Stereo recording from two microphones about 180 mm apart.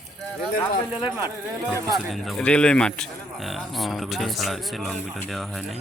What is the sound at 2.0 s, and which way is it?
Speech, centre (ahead or behind).